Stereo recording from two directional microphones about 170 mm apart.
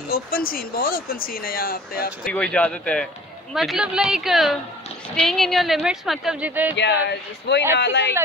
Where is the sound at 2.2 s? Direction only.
5° left (ahead or behind); by 6.8 s 10° right (ahead or behind).